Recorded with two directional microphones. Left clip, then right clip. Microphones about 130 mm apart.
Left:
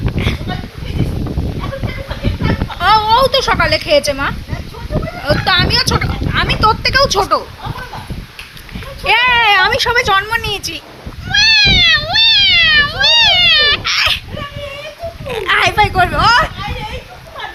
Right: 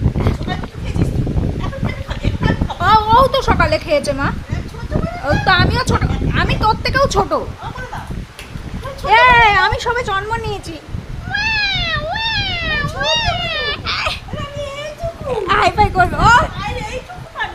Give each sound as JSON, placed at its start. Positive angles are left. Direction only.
{"t": 2.7, "sound": "a sound", "side_deg": 0}
{"t": 3.0, "sound": "a woman's voice", "side_deg": -5}
{"t": 6.3, "sound": "speech", "side_deg": -10}
{"t": 9.0, "sound": "speech", "side_deg": 15}
{"t": 9.9, "sound": "speech", "side_deg": 15}
{"t": 11.3, "sound": "cat", "side_deg": 20}
{"t": 15.3, "sound": "speech", "side_deg": 10}